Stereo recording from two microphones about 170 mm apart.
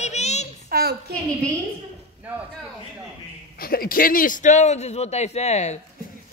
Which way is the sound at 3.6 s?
60° left (ahead or behind).